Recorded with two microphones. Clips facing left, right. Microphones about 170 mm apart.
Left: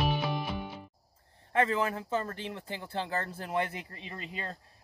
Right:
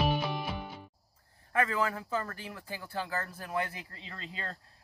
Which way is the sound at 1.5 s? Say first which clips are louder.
Left 2 dB; 25° left (ahead or behind).